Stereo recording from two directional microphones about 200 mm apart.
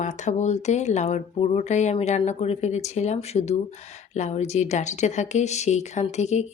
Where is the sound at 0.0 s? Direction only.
35° left (ahead or behind).